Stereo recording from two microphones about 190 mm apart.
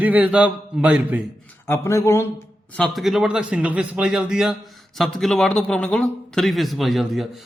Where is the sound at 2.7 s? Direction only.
5° left (ahead or behind).